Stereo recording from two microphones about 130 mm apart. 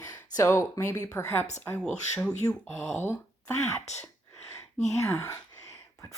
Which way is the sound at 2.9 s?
15° left (ahead or behind).